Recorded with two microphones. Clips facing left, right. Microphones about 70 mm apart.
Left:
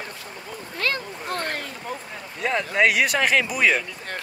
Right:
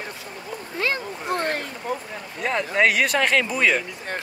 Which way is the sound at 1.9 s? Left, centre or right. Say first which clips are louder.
Right 4 dB; centre.